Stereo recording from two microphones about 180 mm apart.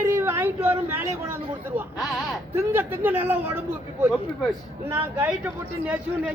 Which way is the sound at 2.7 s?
10° right (ahead or behind).